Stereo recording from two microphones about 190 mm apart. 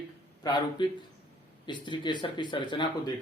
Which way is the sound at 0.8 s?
25° left (ahead or behind).